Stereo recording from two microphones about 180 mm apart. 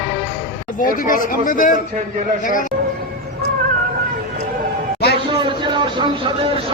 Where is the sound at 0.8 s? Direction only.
50° left (ahead or behind).